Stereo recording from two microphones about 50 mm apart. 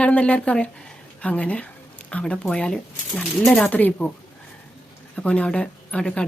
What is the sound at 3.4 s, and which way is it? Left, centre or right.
Speech, centre.